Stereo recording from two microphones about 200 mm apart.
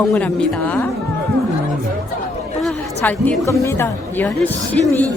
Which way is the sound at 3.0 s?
10° left (ahead or behind).